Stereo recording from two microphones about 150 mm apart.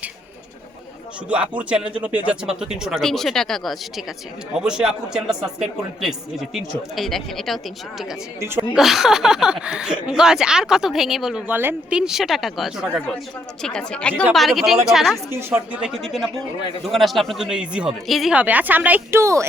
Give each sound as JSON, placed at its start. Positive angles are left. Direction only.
{"t": 1.3, "sound": "speech", "side_deg": -10}
{"t": 8.4, "sound": "speech", "side_deg": -15}
{"t": 8.7, "sound": "speech", "side_deg": 0}
{"t": 15.3, "sound": "speech", "side_deg": -15}